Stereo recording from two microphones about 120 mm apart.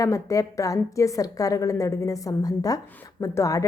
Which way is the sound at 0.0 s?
25° left (ahead or behind).